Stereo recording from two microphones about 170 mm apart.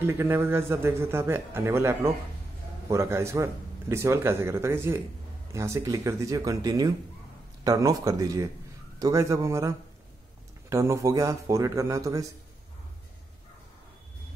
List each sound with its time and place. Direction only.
0.0 s a man's voice: 15° right (ahead or behind)